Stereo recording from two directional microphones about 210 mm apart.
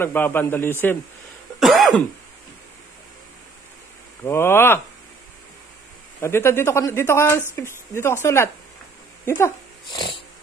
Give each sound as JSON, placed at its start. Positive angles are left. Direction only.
{"t": 0.0, "sound": "speech", "side_deg": 10}
{"t": 1.6, "sound": "cough", "side_deg": 0}
{"t": 4.2, "sound": "speech", "side_deg": 10}
{"t": 6.2, "sound": "speech", "side_deg": 10}